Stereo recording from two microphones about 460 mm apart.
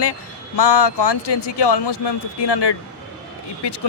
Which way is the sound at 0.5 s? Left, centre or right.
Left.